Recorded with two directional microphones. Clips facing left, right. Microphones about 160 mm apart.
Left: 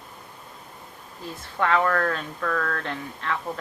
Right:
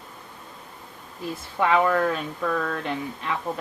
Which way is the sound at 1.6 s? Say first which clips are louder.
Right 2 dB; 10° right (ahead or behind).